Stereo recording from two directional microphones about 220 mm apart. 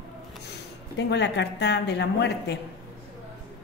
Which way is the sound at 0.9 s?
55° left (ahead or behind).